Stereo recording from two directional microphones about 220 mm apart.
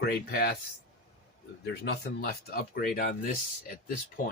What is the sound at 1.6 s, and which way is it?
Speech, 45° left (ahead or behind).